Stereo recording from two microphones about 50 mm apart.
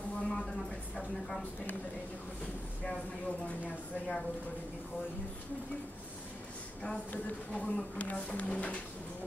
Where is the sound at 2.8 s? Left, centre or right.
Left.